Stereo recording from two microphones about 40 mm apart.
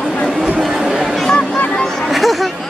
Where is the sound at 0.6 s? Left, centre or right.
Centre.